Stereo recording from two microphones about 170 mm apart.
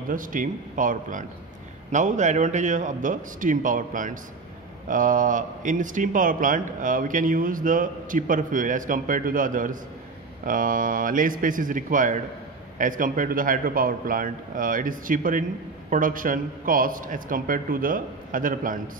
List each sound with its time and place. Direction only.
0.1 s a man's voice: 50° right (ahead or behind)